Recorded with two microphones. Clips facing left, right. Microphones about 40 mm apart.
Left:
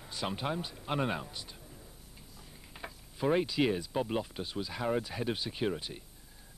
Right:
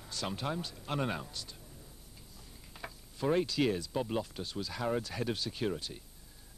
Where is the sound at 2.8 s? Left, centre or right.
Centre.